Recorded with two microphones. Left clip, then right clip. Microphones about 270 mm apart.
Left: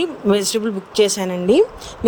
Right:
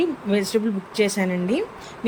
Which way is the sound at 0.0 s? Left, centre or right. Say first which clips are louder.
Left 5 dB; left.